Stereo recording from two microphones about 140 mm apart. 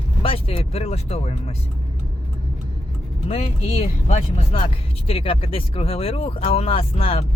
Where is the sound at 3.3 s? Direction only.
50° left (ahead or behind).